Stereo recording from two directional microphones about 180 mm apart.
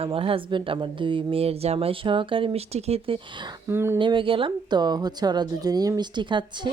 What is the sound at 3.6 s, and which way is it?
Speech, 15° right (ahead or behind).